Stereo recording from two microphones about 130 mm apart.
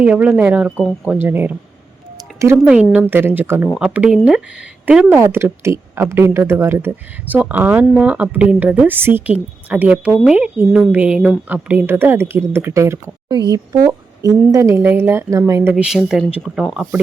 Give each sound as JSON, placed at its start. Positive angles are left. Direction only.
{"t": 0.0, "sound": "a woman's voice", "side_deg": -10}
{"t": 2.6, "sound": "a woman's voice", "side_deg": -10}
{"t": 13.2, "sound": "a woman's voice", "side_deg": -35}
{"t": 15.7, "sound": "speech", "side_deg": -5}